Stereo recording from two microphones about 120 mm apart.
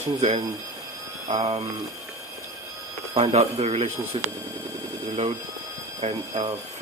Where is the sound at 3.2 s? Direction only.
60° right (ahead or behind).